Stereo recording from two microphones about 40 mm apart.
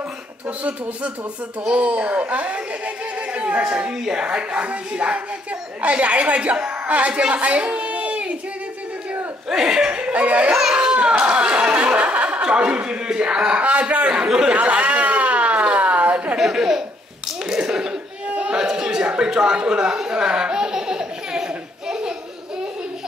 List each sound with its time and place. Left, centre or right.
1.7 s speech: right
3.3 s a sound: right
3.6 s a woman's voice: right
9.5 s speech: centre
9.8 s music: right
10.5 s a sound: centre
13.2 s speech: right
14.0 s speech: right
14.5 s a sound: right
16.3 s speech: centre
17.5 s slap: centre
18.4 s a sound: centre